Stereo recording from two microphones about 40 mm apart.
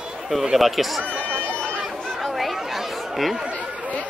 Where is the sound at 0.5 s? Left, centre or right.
Centre.